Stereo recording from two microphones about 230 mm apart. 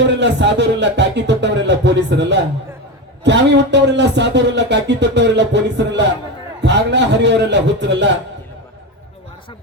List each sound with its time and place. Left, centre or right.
0.0 s speech: right